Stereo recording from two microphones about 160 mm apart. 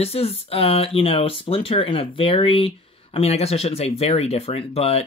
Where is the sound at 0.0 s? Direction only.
40° left (ahead or behind).